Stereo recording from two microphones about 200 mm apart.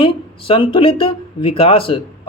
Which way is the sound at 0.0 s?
25° left (ahead or behind).